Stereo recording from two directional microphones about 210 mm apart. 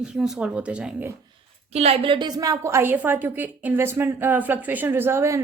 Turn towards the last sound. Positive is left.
turn(degrees=-10)  # may be behind; listen again after turning